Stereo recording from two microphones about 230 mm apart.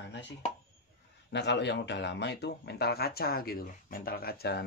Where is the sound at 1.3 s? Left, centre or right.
Left.